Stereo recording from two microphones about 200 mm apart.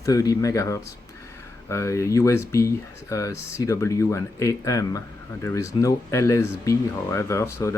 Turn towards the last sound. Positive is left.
turn(degrees=15)  # may be behind; listen again after turning